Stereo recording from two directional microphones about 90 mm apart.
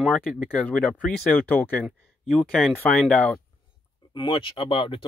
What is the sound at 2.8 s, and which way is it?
Speech, 15° left (ahead or behind).